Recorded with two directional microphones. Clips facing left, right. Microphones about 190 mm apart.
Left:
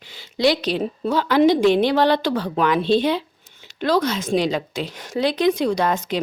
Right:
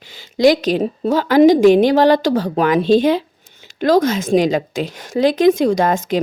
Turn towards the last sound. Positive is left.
turn(degrees=-45)  # may be behind; listen again after turning